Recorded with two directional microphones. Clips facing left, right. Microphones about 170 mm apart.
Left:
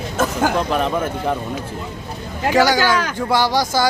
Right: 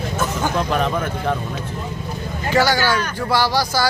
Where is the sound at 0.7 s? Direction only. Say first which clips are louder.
Left 1 dB; 5° left (ahead or behind).